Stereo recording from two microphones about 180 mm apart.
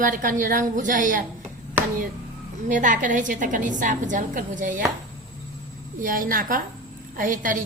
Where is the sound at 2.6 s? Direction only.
45° right (ahead or behind).